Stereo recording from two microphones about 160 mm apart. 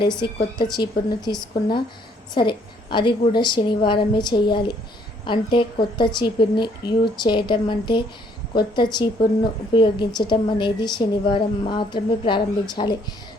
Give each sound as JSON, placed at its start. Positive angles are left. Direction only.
{"t": 0.7, "sound": "a woman's voice", "side_deg": 25}